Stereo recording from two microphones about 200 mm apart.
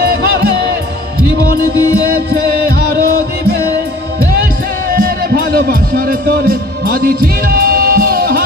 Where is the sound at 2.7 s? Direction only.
50° right (ahead or behind).